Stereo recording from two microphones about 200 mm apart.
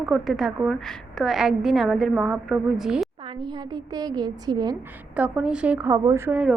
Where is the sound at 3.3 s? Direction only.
20° right (ahead or behind).